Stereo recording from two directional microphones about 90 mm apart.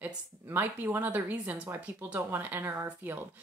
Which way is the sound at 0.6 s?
20° right (ahead or behind).